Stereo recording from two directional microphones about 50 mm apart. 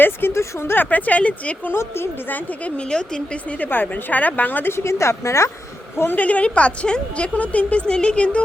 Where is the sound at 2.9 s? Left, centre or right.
Centre.